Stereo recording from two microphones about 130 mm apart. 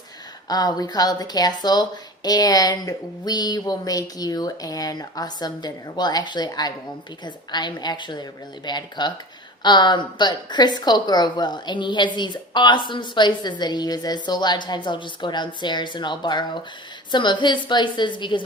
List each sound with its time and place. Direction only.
0.4 s a woman's voice: 30° left (ahead or behind)